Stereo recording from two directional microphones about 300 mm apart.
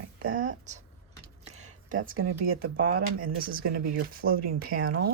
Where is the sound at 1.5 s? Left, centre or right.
Right.